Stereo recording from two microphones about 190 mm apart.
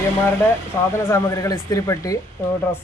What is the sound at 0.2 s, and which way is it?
Speech, 10° left (ahead or behind).